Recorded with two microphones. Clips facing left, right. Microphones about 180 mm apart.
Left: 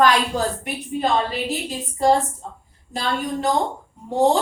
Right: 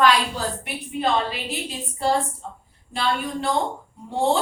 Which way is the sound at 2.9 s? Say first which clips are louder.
Left 1 dB; 40° left (ahead or behind).